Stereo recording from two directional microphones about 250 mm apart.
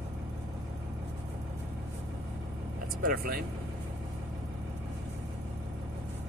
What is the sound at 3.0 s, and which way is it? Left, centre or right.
Speech, right.